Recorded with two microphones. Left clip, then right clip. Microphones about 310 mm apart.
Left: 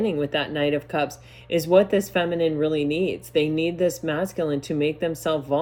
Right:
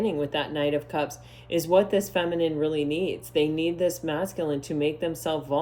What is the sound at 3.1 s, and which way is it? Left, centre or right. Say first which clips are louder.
Speech: left 2 dB; left.